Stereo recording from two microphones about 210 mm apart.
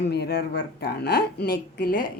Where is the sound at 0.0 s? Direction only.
50° left (ahead or behind).